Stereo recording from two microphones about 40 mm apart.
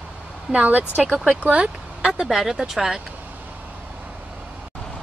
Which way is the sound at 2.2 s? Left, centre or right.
Centre.